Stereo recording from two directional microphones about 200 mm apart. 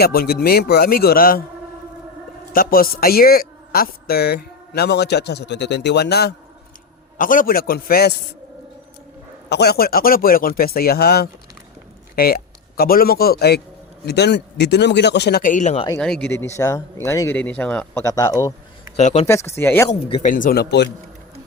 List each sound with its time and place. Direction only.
0.0 s a woman's voice: 50° left (ahead or behind)
2.5 s a woman's voice: 45° left (ahead or behind)
7.2 s a woman's voice: 45° left (ahead or behind)
9.5 s a woman's voice: 55° left (ahead or behind); by 15.9 s 35° left (ahead or behind)
16.0 s speech: 5° left (ahead or behind)
18.9 s speech: 35° left (ahead or behind)
19.3 s speech: 15° left (ahead or behind)
19.9 s speech: 30° left (ahead or behind)
20.3 s a woman's voice: 45° left (ahead or behind)